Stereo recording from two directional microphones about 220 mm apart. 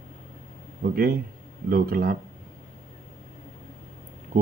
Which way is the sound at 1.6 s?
45° right (ahead or behind).